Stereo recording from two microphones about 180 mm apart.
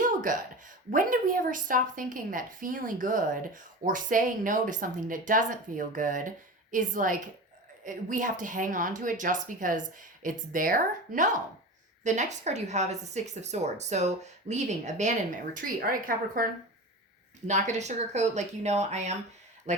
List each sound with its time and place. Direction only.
0.0 s a sound: 45° right (ahead or behind)
0.9 s a woman's voice: 50° right (ahead or behind)
17.4 s speech: 40° right (ahead or behind)